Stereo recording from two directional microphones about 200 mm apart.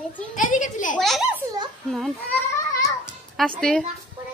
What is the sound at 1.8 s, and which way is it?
Speech, centre (ahead or behind).